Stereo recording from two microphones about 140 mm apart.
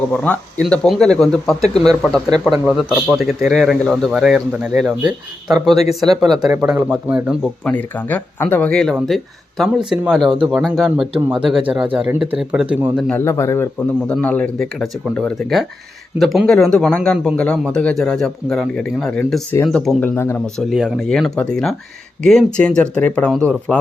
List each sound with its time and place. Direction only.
0.1 s a man's voice: 10° left (ahead or behind); by 7.5 s 5° right (ahead or behind)
7.6 s a man's voice: 10° left (ahead or behind)
11.1 s speech: 35° right (ahead or behind)
11.6 s a man's voice: 5° right (ahead or behind)
13.1 s a man's voice: 15° left (ahead or behind)
14.1 s a man's voice: 10° left (ahead or behind)
20.6 s a man's voice: 5° right (ahead or behind)